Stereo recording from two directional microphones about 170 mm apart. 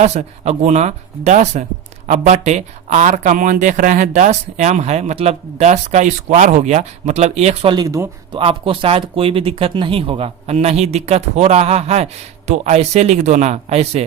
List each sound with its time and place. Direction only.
0.0 s speech: 40° right (ahead or behind)
7.8 s speech: 20° right (ahead or behind)
8.3 s speech: 35° right (ahead or behind)